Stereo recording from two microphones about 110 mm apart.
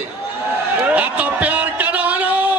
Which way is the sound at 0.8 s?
15° right (ahead or behind).